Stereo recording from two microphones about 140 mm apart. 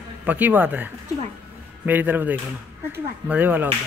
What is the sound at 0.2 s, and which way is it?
Speech, 10° right (ahead or behind).